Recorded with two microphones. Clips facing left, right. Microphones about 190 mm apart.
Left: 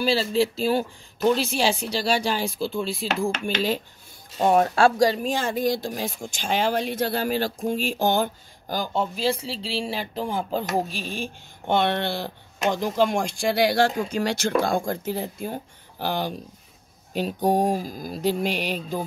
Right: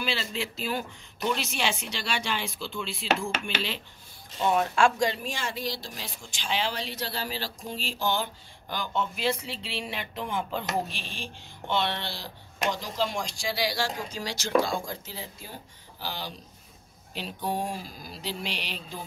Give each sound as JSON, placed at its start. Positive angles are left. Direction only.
{"t": 0.0, "sound": "speech", "side_deg": 35}